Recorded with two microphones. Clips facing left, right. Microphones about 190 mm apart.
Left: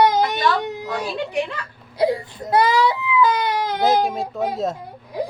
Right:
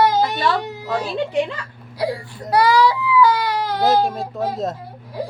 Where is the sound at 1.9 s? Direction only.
20° left (ahead or behind).